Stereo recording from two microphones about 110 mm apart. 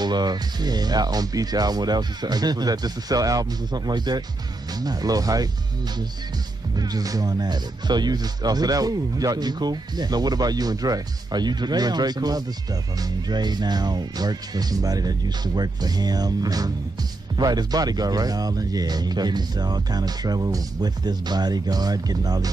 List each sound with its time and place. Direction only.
0.0 s speech: 40° right (ahead or behind)
6.8 s speech: 35° right (ahead or behind)